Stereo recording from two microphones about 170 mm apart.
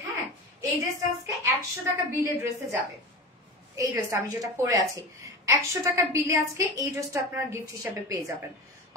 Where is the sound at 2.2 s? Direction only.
15° right (ahead or behind).